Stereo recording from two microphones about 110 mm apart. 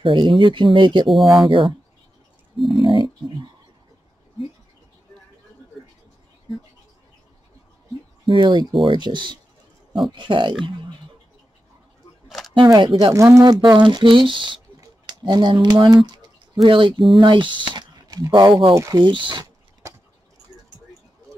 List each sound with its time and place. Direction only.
0.0 s speech: 45° right (ahead or behind)
2.8 s speech: 50° right (ahead or behind)
8.3 s speech: 45° right (ahead or behind)
12.3 s a sound: centre (ahead or behind)
12.5 s speech: 45° right (ahead or behind)
13.1 s speech: 25° right (ahead or behind)
18.8 s speech: 30° right (ahead or behind)
19.0 s speech: 45° right (ahead or behind)